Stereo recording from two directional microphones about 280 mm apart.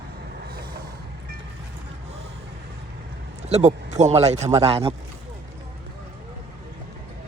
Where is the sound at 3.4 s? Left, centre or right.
Right.